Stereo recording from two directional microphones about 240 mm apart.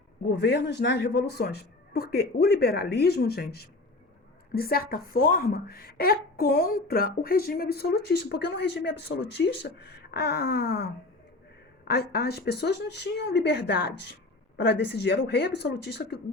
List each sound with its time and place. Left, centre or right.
0.3 s speech: left